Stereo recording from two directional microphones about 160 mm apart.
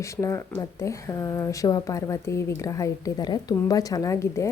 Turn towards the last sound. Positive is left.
turn(degrees=20)  # may be behind; listen again after turning